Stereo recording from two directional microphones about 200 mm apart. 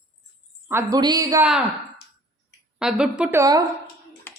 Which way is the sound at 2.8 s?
5° right (ahead or behind).